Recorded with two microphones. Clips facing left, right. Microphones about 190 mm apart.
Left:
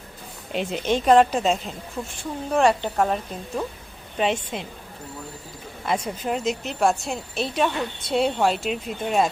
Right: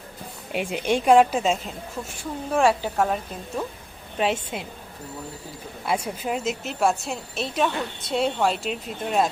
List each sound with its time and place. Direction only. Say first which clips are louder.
0.5 s a woman's voice: even; 10° right (ahead or behind)
4.2 s a woman's voice: left 1 dB; 5° right (ahead or behind)
5.8 s a woman's voice: left 1 dB; 5° right (ahead or behind)